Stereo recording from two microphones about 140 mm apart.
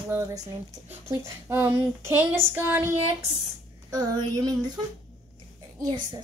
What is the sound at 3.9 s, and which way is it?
Speech, 25° right (ahead or behind).